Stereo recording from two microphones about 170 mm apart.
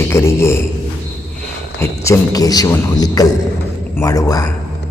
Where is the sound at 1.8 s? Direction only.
15° left (ahead or behind).